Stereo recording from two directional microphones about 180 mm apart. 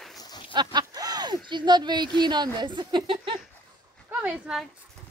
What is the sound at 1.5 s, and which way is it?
Speech, 25° right (ahead or behind).